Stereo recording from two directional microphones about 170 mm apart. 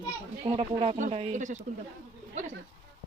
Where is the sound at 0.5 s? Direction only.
35° right (ahead or behind).